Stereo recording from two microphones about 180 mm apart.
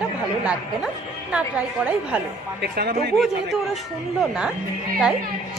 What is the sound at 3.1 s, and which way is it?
A woman's voice, centre (ahead or behind).